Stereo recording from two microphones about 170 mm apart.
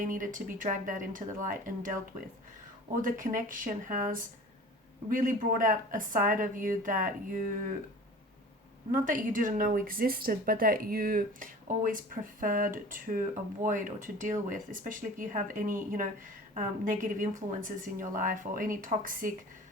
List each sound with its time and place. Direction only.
0.0 s a woman's voice: 50° right (ahead or behind)
3.0 s a woman's voice: 50° right (ahead or behind)
8.9 s a woman's voice: 50° right (ahead or behind)